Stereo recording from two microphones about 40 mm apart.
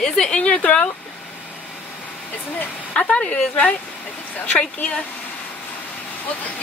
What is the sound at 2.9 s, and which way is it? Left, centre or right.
Speech, left.